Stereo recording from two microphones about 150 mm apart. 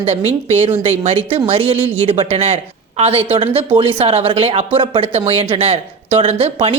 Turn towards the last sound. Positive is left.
turn(degrees=-40)  # may be behind; listen again after turning